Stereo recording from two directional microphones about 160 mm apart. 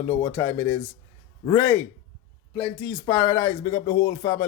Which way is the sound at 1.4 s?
30° left (ahead or behind).